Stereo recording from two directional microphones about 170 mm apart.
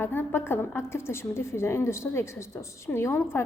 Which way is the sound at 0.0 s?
10° left (ahead or behind).